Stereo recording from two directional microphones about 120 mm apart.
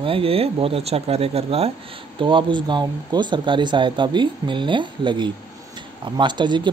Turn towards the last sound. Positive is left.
turn(degrees=-40)  # may be behind; listen again after turning